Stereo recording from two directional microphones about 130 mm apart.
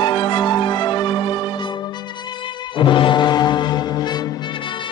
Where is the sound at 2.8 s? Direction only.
40° left (ahead or behind).